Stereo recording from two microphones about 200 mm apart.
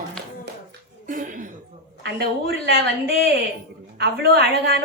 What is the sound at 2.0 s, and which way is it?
Speech, 55° right (ahead or behind).